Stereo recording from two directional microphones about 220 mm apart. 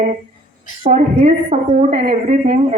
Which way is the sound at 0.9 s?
30° right (ahead or behind).